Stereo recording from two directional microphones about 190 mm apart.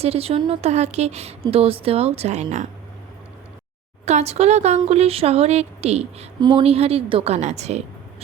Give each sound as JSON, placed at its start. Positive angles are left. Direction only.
{"t": 0.0, "sound": "speech", "side_deg": -30}
{"t": 4.0, "sound": "speech", "side_deg": -35}